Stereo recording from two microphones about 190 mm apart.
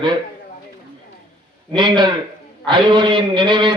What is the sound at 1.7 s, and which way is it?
A man's voice, 25° right (ahead or behind).